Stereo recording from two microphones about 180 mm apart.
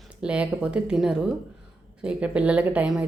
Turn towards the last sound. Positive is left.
turn(degrees=-5)  # may be behind; listen again after turning